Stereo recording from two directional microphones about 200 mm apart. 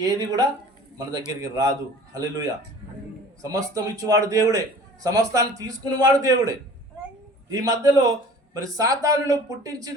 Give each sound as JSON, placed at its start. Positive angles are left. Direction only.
{"t": 0.0, "sound": "a man's voice", "side_deg": -20}